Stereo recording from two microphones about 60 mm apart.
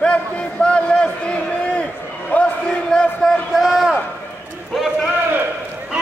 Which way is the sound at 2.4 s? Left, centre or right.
Centre.